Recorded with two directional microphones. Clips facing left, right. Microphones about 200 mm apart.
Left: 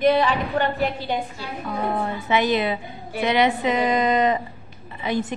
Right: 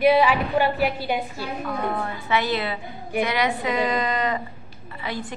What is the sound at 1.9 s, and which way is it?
A woman's voice, 20° left (ahead or behind).